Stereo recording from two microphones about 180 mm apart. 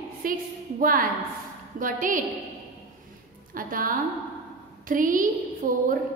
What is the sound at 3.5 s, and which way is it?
A woman's voice, 50° right (ahead or behind).